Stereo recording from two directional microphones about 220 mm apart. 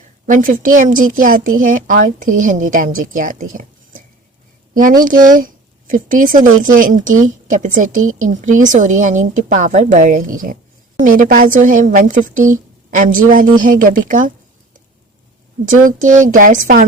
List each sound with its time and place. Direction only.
0.3 s a woman's voice: 35° right (ahead or behind)
15.6 s a woman's voice: 35° right (ahead or behind)